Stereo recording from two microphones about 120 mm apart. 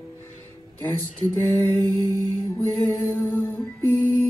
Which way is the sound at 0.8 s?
20° left (ahead or behind).